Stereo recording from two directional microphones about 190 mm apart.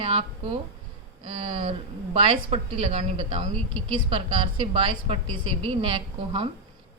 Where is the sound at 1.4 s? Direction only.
30° right (ahead or behind).